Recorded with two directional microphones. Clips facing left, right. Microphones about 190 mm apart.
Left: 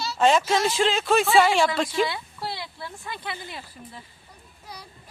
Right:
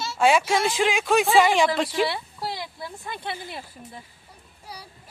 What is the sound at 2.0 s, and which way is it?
Speech, 35° right (ahead or behind).